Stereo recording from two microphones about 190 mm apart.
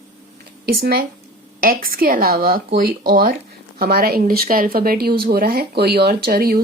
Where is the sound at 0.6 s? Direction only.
55° right (ahead or behind).